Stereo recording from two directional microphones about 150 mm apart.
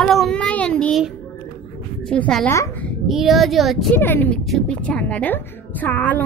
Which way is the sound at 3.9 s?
15° left (ahead or behind).